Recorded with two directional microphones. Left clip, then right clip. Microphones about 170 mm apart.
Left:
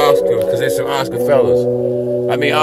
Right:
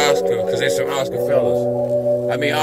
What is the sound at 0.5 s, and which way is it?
Speech, 45° left (ahead or behind).